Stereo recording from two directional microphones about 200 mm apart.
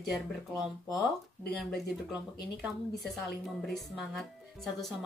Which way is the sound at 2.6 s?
Centre (ahead or behind).